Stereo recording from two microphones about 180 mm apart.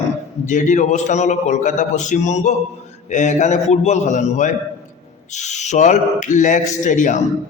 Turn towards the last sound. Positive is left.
turn(degrees=45)  # may be behind; listen again after turning